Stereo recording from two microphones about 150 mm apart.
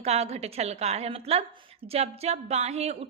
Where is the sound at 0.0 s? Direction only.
45° right (ahead or behind).